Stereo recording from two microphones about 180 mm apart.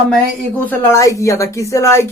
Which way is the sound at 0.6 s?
10° left (ahead or behind).